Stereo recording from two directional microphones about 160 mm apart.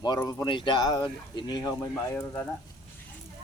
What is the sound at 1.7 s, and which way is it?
Speech, 15° left (ahead or behind).